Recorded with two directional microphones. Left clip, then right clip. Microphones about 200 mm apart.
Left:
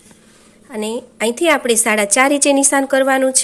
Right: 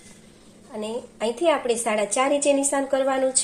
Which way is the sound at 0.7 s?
35° left (ahead or behind).